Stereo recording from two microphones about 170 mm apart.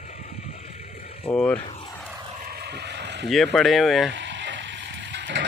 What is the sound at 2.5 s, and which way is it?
Vehicle, 75° right (ahead or behind).